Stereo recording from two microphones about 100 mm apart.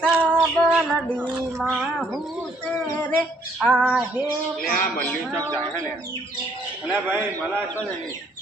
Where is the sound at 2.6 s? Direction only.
15° left (ahead or behind).